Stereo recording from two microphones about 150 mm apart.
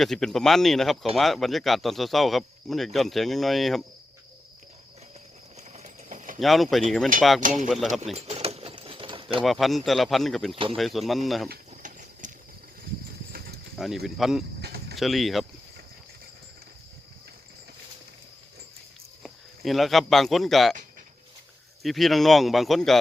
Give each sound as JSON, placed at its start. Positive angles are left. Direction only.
{"t": 0.0, "sound": "speech", "side_deg": 0}
{"t": 5.5, "sound": "clip-clop", "side_deg": -50}
{"t": 6.4, "sound": "speech", "side_deg": 0}
{"t": 8.1, "sound": "a sound", "side_deg": -45}
{"t": 9.4, "sound": "speech", "side_deg": 0}
{"t": 10.5, "sound": "speech", "side_deg": -40}
{"t": 10.8, "sound": "speech", "side_deg": 0}
{"t": 11.7, "sound": "a sound", "side_deg": -55}
{"t": 13.3, "sound": "a sound", "side_deg": -85}
{"t": 13.7, "sound": "speech", "side_deg": 0}
{"t": 14.6, "sound": "cricket", "side_deg": -90}
{"t": 14.9, "sound": "speech", "side_deg": 0}
{"t": 19.2, "sound": "speech", "side_deg": 0}
{"t": 21.8, "sound": "speech", "side_deg": 0}